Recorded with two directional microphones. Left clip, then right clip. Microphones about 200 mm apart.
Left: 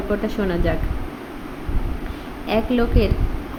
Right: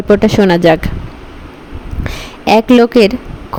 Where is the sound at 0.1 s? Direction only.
50° right (ahead or behind).